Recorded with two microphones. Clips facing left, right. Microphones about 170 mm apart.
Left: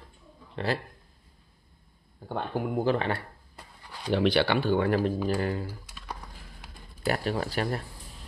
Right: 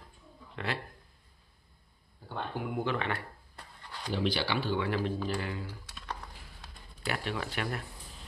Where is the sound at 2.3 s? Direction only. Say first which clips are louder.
Left 6 dB; 40° left (ahead or behind).